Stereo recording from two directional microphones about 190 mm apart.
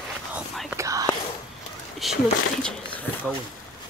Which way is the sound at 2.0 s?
Centre (ahead or behind).